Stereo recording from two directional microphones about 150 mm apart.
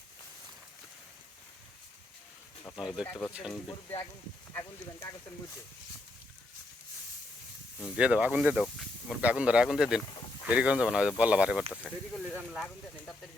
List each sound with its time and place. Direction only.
2.7 s speech: 5° right (ahead or behind)
3.1 s speech: 10° left (ahead or behind)
3.3 s speech: 5° right (ahead or behind)
4.5 s speech: 20° left (ahead or behind)
7.9 s speech: 5° right (ahead or behind)